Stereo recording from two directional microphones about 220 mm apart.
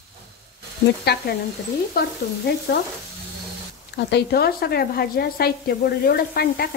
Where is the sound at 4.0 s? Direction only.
50° left (ahead or behind).